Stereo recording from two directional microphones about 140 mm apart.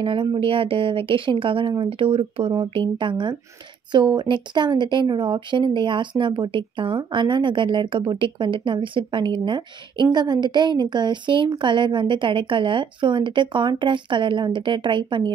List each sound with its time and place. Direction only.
0.0 s speech: 40° right (ahead or behind)